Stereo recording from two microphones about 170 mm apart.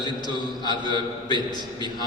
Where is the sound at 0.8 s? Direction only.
25° left (ahead or behind).